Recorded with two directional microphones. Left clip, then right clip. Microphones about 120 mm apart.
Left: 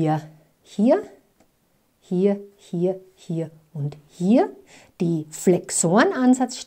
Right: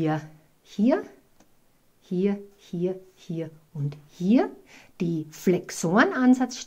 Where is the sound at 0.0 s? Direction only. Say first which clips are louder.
Left 4 dB; 35° left (ahead or behind).